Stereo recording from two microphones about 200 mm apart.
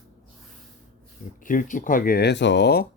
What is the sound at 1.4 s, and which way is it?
Speech, 40° left (ahead or behind).